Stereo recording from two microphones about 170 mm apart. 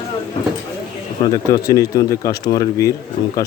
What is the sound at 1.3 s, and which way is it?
A man's voice, 20° left (ahead or behind).